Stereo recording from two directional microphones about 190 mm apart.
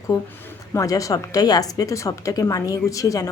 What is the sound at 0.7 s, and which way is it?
A woman's voice, 15° left (ahead or behind).